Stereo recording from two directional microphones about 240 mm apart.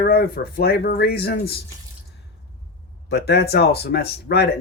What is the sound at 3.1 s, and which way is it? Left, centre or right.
Speech, left.